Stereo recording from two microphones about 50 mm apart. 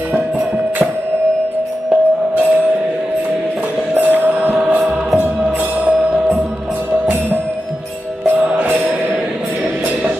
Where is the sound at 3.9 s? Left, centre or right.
Right.